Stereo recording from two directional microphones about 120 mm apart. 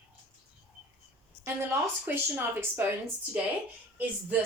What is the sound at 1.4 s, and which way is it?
A woman's voice, 20° right (ahead or behind).